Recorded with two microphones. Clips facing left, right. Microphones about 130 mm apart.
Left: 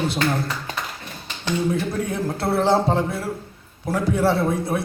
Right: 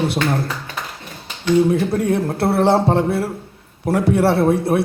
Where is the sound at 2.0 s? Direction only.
70° right (ahead or behind).